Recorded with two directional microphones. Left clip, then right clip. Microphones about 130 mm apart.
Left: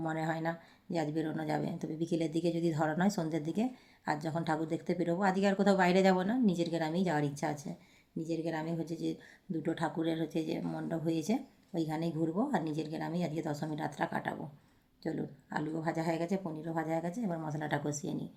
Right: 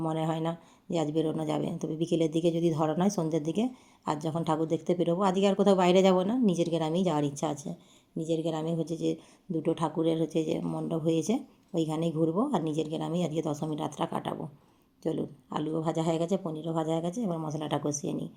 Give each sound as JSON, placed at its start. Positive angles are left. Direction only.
{"t": 0.0, "sound": "speech", "side_deg": -20}